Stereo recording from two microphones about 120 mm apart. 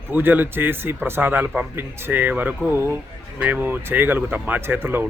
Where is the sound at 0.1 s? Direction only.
15° right (ahead or behind).